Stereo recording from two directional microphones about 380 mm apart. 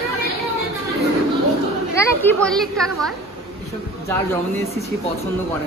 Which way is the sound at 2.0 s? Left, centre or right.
Centre.